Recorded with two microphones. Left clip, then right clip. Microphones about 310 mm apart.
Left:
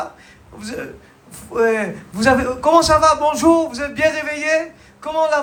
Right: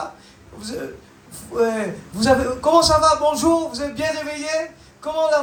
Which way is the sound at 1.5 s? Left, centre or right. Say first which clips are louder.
Left 3 dB; left.